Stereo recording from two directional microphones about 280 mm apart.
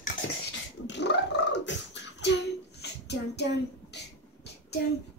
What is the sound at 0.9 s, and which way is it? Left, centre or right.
Beatboxing, left.